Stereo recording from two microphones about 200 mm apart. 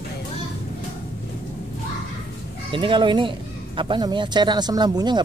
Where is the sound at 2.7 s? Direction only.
25° right (ahead or behind).